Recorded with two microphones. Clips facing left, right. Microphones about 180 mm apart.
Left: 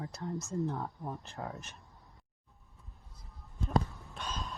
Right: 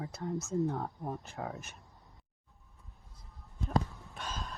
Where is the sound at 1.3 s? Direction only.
5° right (ahead or behind).